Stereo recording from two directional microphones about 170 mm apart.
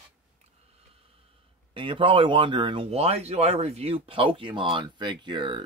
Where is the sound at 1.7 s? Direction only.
30° right (ahead or behind).